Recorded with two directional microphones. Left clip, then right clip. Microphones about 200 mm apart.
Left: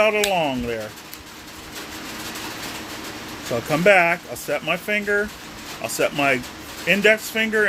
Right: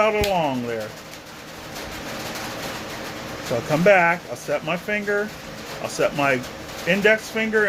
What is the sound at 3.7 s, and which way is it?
Speech, 30° left (ahead or behind).